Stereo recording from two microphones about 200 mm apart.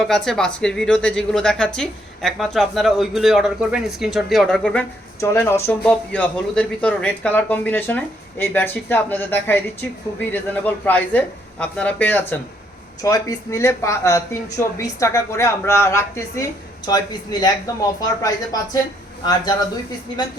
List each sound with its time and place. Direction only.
0.0 s a woman's voice: centre (ahead or behind); by 19.6 s 20° left (ahead or behind)